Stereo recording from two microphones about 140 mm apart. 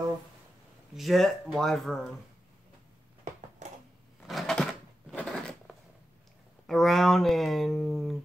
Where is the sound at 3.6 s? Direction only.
60° right (ahead or behind).